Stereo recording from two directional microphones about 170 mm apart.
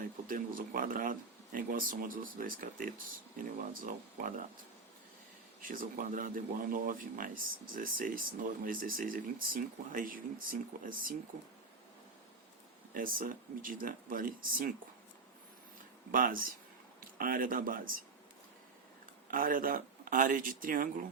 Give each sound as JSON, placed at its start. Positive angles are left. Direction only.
{"t": 0.3, "sound": "speech", "side_deg": -55}
{"t": 5.6, "sound": "speech", "side_deg": -55}
{"t": 12.9, "sound": "speech", "side_deg": -55}
{"t": 16.1, "sound": "speech", "side_deg": -55}
{"t": 19.3, "sound": "speech", "side_deg": -55}